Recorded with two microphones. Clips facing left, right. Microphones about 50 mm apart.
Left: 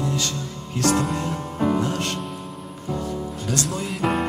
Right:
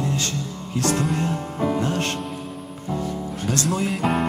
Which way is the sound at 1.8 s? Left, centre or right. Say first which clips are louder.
Right 1 dB; right.